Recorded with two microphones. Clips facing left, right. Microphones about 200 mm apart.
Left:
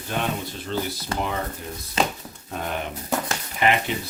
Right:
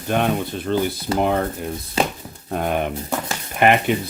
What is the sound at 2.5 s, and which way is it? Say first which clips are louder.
Speech: right 8 dB; 55° right (ahead or behind).